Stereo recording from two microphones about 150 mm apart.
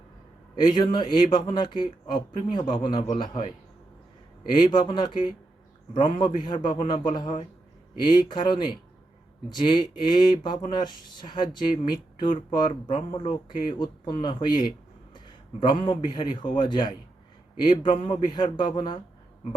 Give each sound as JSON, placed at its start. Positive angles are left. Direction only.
{"t": 0.6, "sound": "speech", "side_deg": 30}
{"t": 12.6, "sound": "speech", "side_deg": 35}